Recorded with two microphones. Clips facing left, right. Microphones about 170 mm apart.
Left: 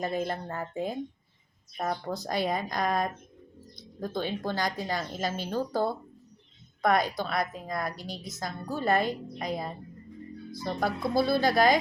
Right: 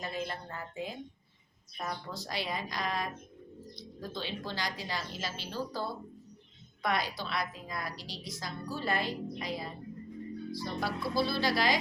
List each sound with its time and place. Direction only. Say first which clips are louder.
0.0 s a woman's voice: left 7 dB; 45° left (ahead or behind)